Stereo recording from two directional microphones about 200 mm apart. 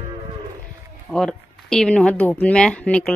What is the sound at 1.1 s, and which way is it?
Speech, 5° left (ahead or behind).